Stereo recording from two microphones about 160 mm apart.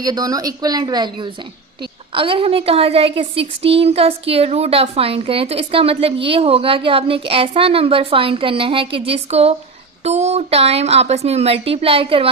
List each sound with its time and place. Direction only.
0.0 s a woman's voice: 25° right (ahead or behind)